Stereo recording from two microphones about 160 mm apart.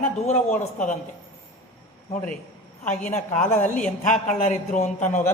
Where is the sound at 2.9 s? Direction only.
10° left (ahead or behind).